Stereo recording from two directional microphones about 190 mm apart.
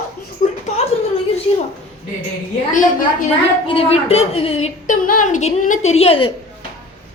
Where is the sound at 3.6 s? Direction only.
30° left (ahead or behind).